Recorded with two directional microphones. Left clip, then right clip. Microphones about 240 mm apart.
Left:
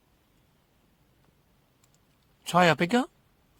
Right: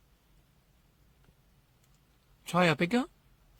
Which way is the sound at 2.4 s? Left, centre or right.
Left.